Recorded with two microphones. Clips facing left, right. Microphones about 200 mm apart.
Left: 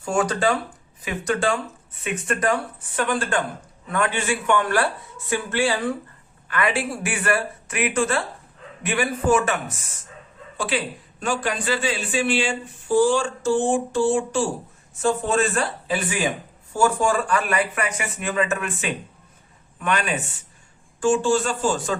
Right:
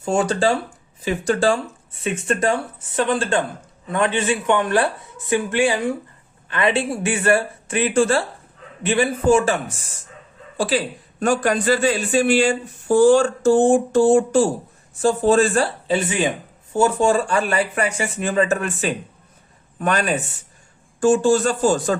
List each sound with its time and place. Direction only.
0.0 s a man's voice: 25° right (ahead or behind)